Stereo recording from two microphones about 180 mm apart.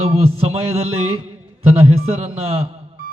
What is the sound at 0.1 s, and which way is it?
Speech, 35° right (ahead or behind).